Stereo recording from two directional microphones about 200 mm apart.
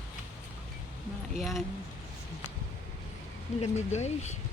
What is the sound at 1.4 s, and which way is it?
Speech, centre (ahead or behind).